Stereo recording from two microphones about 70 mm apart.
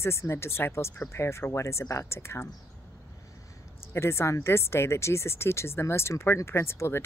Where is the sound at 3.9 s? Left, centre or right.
Left.